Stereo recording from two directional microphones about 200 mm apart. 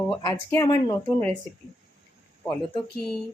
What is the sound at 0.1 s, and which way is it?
Speech, 20° left (ahead or behind).